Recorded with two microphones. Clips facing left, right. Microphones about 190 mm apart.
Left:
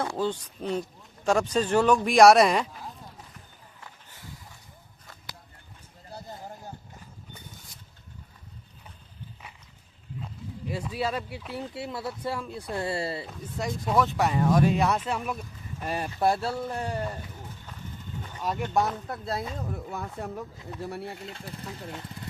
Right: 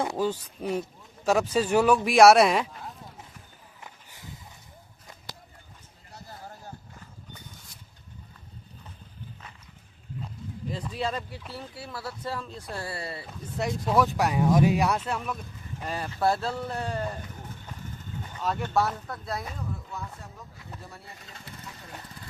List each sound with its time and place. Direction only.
0.0 s speech: 15° right (ahead or behind)
3.8 s a sound: 20° right (ahead or behind)
10.7 s speech: 10° left (ahead or behind)
11.5 s speech: 20° left (ahead or behind)
13.6 s speech: centre (ahead or behind)
18.3 s speech: 10° left (ahead or behind)
19.7 s speech: 60° left (ahead or behind)
20.8 s speech: 75° left (ahead or behind)